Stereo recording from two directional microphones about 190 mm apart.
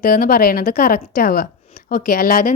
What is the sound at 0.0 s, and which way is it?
A woman's voice, 50° left (ahead or behind).